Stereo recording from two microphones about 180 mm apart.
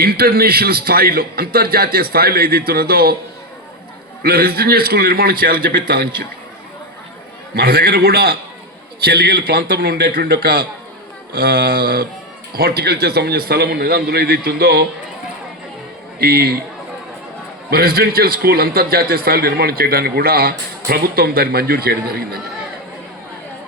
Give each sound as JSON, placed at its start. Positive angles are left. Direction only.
{"t": 0.0, "sound": "a man's voice", "side_deg": -60}
{"t": 4.2, "sound": "a man's voice", "side_deg": -60}
{"t": 7.5, "sound": "a man's voice", "side_deg": -55}
{"t": 16.2, "sound": "a man's voice", "side_deg": -55}
{"t": 17.7, "sound": "a man's voice", "side_deg": -60}